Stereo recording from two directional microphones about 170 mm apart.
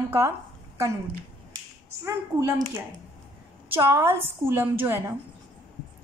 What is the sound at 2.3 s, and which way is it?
Speech, 10° right (ahead or behind).